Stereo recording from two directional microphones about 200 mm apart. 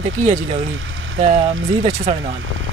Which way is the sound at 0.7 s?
70° right (ahead or behind).